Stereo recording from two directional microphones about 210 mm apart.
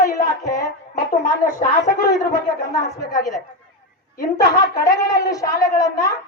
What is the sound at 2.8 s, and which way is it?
Speech, 15° left (ahead or behind).